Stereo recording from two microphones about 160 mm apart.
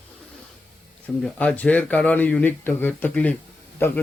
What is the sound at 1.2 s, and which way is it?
A man's voice, 5° left (ahead or behind).